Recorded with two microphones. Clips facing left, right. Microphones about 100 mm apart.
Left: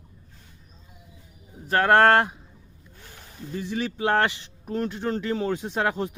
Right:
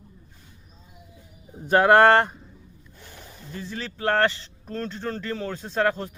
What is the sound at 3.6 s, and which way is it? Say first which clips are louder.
Speech: left 5 dB; 15° left (ahead or behind).